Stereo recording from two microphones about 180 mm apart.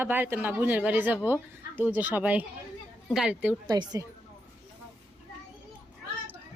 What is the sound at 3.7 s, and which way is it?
Speech, 20° right (ahead or behind).